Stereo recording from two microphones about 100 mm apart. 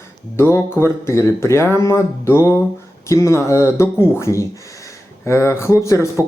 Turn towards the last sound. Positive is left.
turn(degrees=30)  # may be behind; listen again after turning